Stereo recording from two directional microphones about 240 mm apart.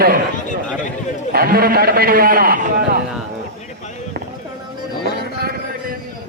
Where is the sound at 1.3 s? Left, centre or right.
Right.